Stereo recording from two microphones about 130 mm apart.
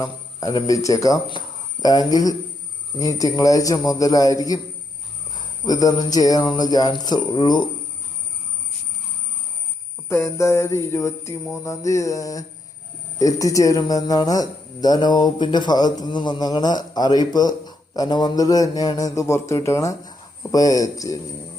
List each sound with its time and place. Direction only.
0.0 s music: 30° left (ahead or behind)
1.3 s speech: 35° left (ahead or behind)
3.0 s music: 25° left (ahead or behind)
5.3 s a man's voice: 30° left (ahead or behind)
10.1 s music: 20° left (ahead or behind)
13.1 s a man's voice: 25° left (ahead or behind)